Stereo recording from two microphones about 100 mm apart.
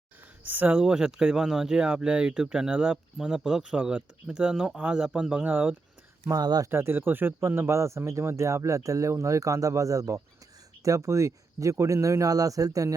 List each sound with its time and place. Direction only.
0.4 s speech: 15° right (ahead or behind)
6.2 s speech: 40° right (ahead or behind)
6.7 s speech: 25° right (ahead or behind)